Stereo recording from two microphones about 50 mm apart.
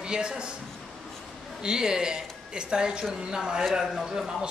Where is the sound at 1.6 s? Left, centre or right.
Centre.